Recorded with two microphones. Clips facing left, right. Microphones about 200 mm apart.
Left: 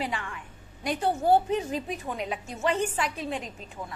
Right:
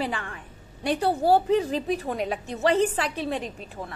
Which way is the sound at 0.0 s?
35° right (ahead or behind).